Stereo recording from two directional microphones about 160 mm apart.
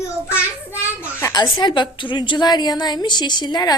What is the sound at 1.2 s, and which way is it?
A woman's voice, 15° left (ahead or behind).